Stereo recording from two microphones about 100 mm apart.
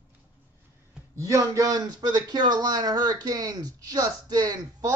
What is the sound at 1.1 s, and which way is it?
A man's voice, 35° right (ahead or behind).